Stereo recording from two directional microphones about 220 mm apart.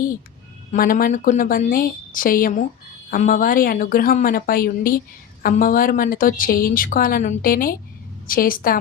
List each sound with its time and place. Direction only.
0.7 s a woman's voice: 40° left (ahead or behind)